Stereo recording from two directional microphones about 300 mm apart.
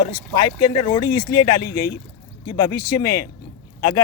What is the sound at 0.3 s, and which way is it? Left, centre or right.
Speech, centre.